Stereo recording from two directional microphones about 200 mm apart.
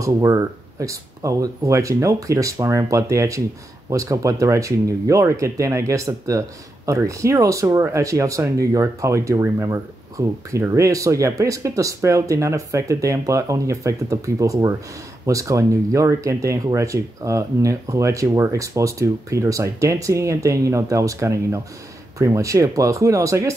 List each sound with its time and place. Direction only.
0.0 s speech: 15° right (ahead or behind)